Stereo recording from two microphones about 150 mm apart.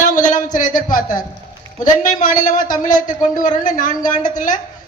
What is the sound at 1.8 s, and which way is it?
A man's voice, 60° left (ahead or behind).